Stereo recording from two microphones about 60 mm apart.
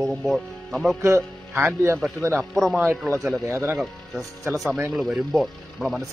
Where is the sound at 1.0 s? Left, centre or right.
Right.